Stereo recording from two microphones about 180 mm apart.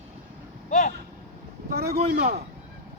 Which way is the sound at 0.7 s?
45° left (ahead or behind).